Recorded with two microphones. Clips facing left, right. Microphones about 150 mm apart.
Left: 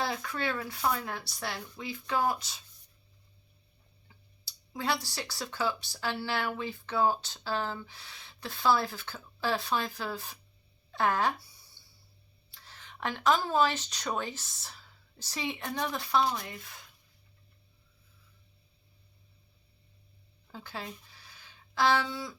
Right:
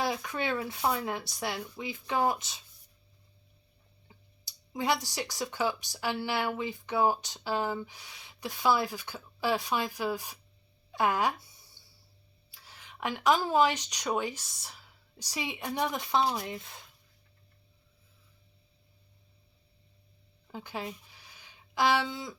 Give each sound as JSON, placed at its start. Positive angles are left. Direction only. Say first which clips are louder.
{"t": 0.0, "sound": "speech", "louder": "right 1 dB", "side_deg": -15}
{"t": 4.1, "sound": "speech", "louder": "right 3 dB", "side_deg": -20}
{"t": 12.5, "sound": "speech", "louder": "left 1 dB", "side_deg": -10}
{"t": 20.5, "sound": "a sound", "louder": "right 3 dB", "side_deg": -15}